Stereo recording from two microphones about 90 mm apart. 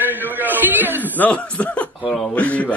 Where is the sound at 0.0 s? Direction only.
20° right (ahead or behind).